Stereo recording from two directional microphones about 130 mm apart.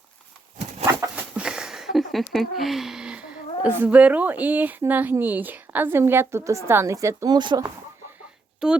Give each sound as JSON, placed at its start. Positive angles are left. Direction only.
{"t": 1.1, "sound": "speech", "side_deg": -5}
{"t": 7.3, "sound": "speech", "side_deg": -35}
{"t": 8.6, "sound": "speech", "side_deg": -5}